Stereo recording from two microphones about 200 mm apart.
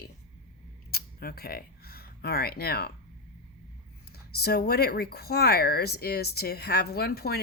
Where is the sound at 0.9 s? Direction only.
50° left (ahead or behind).